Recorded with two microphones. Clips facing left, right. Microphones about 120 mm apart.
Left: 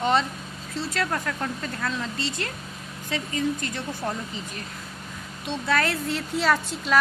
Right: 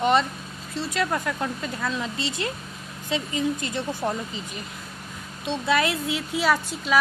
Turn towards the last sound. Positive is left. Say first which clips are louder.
# even
turn(degrees=-5)  # may be behind; listen again after turning